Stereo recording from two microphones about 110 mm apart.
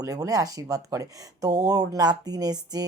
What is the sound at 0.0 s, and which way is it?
Speech, 35° right (ahead or behind).